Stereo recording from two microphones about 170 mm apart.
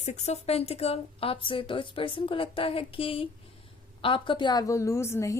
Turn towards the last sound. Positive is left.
turn(degrees=15)  # may be behind; listen again after turning